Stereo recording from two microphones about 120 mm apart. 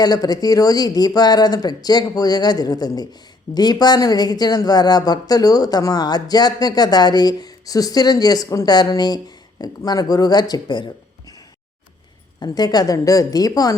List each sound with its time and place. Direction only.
0.0 s speech: 35° left (ahead or behind)
12.4 s speech: 35° left (ahead or behind)